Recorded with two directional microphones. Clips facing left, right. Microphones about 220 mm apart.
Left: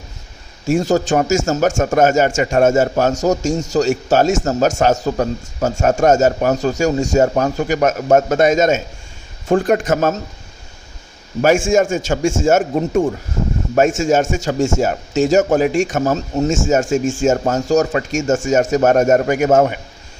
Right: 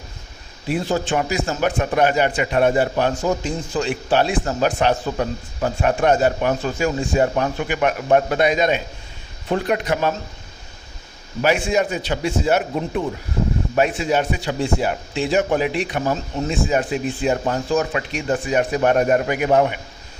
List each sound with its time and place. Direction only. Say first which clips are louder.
0.7 s a man's voice: left 6 dB; 45° left (ahead or behind)
11.4 s a man's voice: left 5 dB; 45° left (ahead or behind)